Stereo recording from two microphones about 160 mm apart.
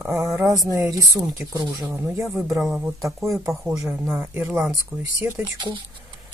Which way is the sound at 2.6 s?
5° right (ahead or behind).